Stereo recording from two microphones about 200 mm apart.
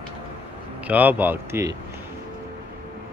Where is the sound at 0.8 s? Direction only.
10° right (ahead or behind).